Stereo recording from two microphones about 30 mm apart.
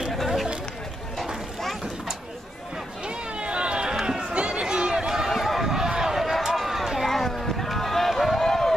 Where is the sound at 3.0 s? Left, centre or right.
Right.